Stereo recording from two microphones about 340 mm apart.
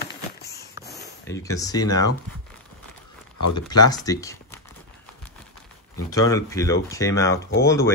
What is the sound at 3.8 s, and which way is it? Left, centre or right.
Speech, centre.